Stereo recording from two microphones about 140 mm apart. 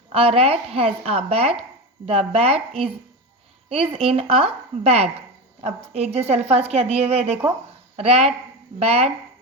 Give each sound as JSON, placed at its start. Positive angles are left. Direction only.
{"t": 0.1, "sound": "speech", "side_deg": -45}